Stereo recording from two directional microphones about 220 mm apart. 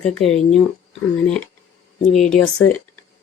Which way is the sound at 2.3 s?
5° left (ahead or behind).